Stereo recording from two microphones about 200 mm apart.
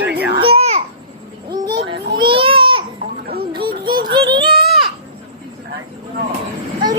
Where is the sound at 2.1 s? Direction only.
25° right (ahead or behind).